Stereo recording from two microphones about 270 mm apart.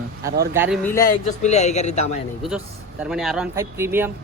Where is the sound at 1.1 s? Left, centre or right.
Left.